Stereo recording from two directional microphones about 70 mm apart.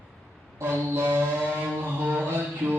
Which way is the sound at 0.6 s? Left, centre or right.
Right.